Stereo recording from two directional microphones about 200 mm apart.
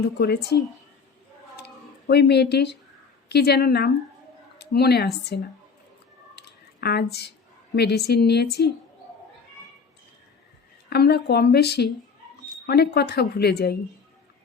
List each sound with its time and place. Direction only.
0.2 s speech: 55° left (ahead or behind)
1.5 s a sound: 55° left (ahead or behind)
3.2 s a woman's voice: 55° left (ahead or behind)
6.3 s a sound: 55° left (ahead or behind)
7.8 s speech: 55° left (ahead or behind)
10.8 s a woman's voice: 55° left (ahead or behind)